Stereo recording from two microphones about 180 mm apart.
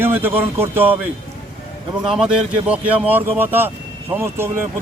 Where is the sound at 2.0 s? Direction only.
5° right (ahead or behind).